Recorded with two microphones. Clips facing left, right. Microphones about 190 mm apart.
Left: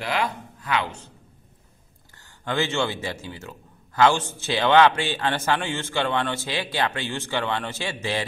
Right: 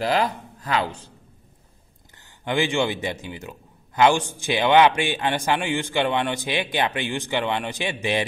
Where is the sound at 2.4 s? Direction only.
15° right (ahead or behind).